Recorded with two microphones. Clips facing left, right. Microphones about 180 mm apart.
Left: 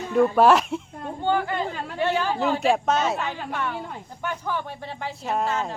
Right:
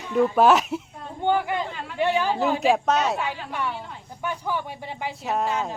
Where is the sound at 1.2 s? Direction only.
15° right (ahead or behind).